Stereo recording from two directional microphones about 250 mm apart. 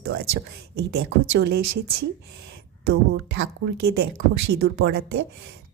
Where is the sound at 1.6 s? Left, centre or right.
Right.